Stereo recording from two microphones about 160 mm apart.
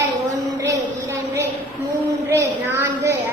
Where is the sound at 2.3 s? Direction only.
15° right (ahead or behind).